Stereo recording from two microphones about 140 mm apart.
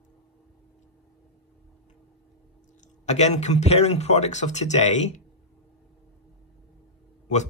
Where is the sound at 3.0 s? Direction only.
55° left (ahead or behind).